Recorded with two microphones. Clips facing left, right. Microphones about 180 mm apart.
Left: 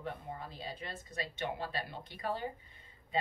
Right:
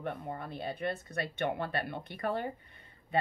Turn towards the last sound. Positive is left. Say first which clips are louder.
# right 4 dB
turn(degrees=-60)  # may be behind; listen again after turning